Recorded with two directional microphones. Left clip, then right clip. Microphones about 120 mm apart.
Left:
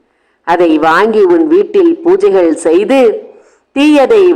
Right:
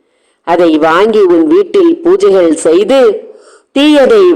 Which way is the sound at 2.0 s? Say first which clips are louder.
Right 1 dB; 15° right (ahead or behind).